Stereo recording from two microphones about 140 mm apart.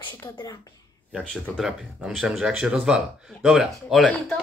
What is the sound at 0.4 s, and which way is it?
Speech, 25° left (ahead or behind).